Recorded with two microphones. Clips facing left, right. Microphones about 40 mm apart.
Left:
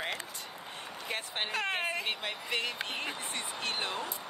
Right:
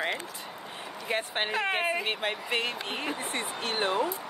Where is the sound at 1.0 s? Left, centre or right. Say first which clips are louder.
Right 6 dB; right.